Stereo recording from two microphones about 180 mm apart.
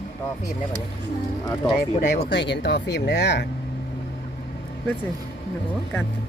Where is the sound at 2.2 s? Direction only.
75° left (ahead or behind).